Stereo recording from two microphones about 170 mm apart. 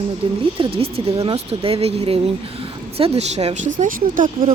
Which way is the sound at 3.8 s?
55° right (ahead or behind).